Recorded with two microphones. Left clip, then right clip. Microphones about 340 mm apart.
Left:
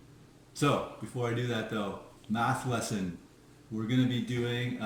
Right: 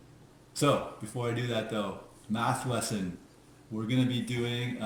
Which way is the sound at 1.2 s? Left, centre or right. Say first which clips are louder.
Right 1 dB; centre.